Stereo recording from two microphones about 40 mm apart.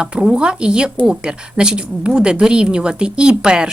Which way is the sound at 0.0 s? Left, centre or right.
Right.